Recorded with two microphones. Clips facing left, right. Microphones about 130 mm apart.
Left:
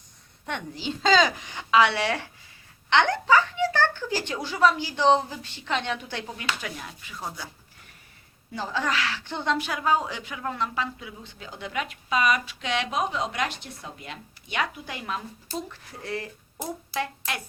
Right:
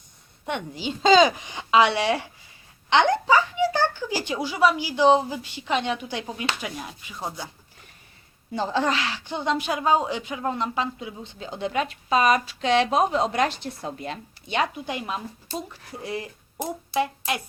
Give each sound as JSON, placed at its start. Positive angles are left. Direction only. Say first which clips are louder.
{"t": 0.4, "sound": "a woman's voice", "louder": "right 3 dB", "side_deg": -15}
{"t": 8.5, "sound": "a woman's voice", "louder": "right 4 dB", "side_deg": -25}